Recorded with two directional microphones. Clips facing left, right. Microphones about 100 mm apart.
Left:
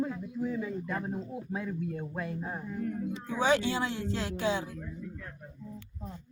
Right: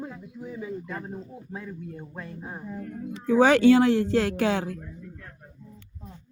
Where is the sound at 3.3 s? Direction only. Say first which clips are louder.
Right 11 dB; 75° right (ahead or behind).